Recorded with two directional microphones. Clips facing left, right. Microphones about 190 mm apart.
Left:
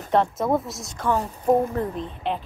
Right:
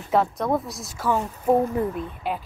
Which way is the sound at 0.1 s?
Centre (ahead or behind).